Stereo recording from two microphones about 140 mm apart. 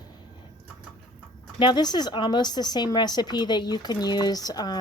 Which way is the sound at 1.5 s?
35° left (ahead or behind).